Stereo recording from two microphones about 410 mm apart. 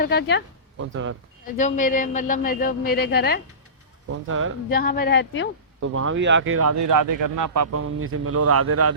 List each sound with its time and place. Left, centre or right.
0.0 s a man's voice: left
0.8 s speech: right
1.5 s a man's voice: centre
4.1 s speech: right
4.7 s a man's voice: left
5.9 s speech: right